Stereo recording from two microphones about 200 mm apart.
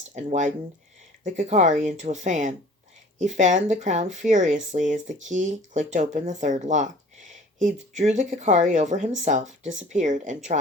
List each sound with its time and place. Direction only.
0.1 s speech: 40° right (ahead or behind)